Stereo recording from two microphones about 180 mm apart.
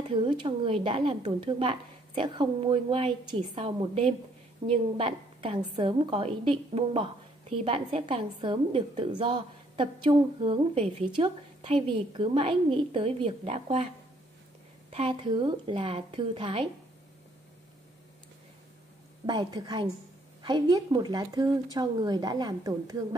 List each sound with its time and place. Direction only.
0.1 s a woman's voice: 30° right (ahead or behind)
14.9 s a woman's voice: 35° right (ahead or behind)
19.2 s a woman's voice: 25° right (ahead or behind)